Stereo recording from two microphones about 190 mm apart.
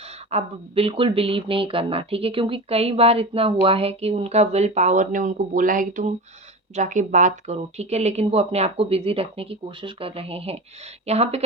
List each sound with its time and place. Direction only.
0.3 s speech: 30° right (ahead or behind)